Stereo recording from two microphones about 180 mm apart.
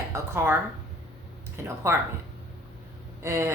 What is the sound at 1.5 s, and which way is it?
Speech, 15° right (ahead or behind).